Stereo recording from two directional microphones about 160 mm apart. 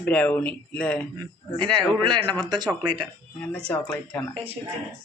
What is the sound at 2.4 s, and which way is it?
Speech, 25° right (ahead or behind).